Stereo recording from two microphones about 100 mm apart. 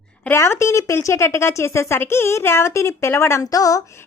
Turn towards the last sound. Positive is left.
turn(degrees=30)  # may be behind; listen again after turning